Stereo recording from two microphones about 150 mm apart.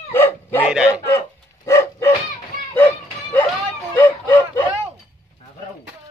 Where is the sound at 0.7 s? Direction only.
5° right (ahead or behind).